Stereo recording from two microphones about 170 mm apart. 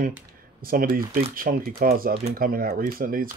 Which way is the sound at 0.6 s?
60° right (ahead or behind).